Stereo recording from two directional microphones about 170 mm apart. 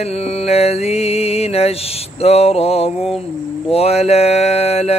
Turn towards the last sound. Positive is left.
turn(degrees=35)  # may be behind; listen again after turning